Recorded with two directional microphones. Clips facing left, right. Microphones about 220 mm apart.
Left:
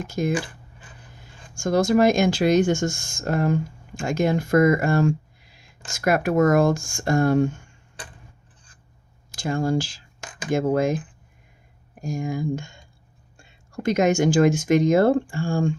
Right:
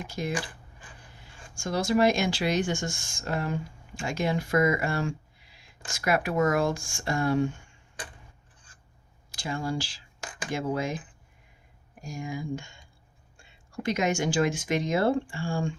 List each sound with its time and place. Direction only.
0.1 s speech: 45° left (ahead or behind)
1.5 s speech: 45° left (ahead or behind)
9.3 s speech: 45° left (ahead or behind)
12.0 s speech: 45° left (ahead or behind)
13.8 s speech: 45° left (ahead or behind)